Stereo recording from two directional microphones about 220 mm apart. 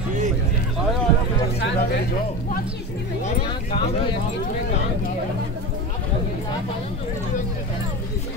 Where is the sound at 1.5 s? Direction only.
50° left (ahead or behind).